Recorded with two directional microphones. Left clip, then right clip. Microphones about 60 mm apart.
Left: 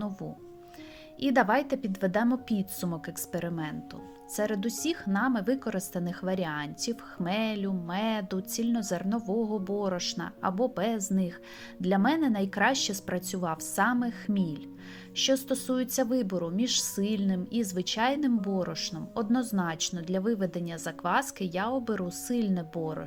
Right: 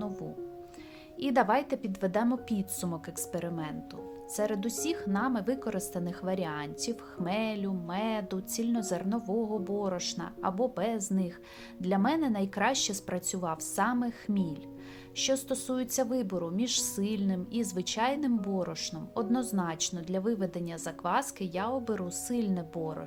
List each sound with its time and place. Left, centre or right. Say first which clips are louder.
1.2 s a woman's voice: left 2 dB; left
8.3 s a woman's voice: left 2 dB; centre
9.3 s a woman's voice: left 1 dB; left
15.1 s a woman's voice: left 3 dB; left